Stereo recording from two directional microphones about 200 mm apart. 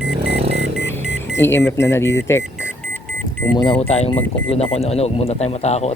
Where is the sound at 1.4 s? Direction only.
10° left (ahead or behind).